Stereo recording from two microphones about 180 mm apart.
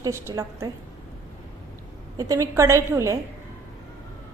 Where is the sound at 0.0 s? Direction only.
15° right (ahead or behind).